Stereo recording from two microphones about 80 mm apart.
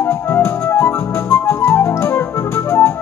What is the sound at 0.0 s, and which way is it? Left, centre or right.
Music, left.